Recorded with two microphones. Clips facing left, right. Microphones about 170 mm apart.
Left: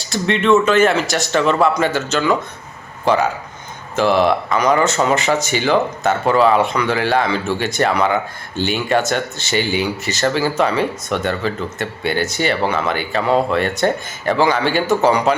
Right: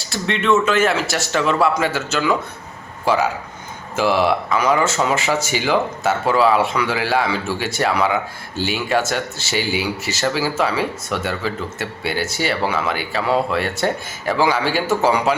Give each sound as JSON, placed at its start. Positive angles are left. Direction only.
{"t": 0.0, "sound": "a man's voice", "side_deg": 0}